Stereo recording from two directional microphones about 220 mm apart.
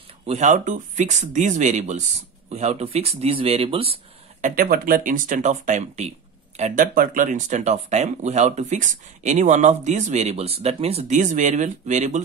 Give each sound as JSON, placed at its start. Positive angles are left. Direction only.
{"t": 0.3, "sound": "speech", "side_deg": -35}